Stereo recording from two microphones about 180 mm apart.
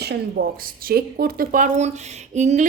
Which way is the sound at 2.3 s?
40° right (ahead or behind).